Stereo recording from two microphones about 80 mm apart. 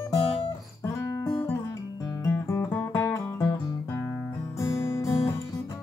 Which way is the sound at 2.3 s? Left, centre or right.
Left.